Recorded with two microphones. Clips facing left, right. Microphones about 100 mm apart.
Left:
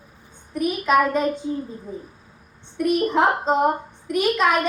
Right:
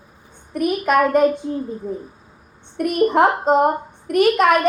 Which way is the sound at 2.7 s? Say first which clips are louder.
Right 3 dB; 55° right (ahead or behind).